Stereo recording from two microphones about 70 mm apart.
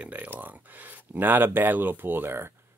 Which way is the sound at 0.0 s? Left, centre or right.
Right.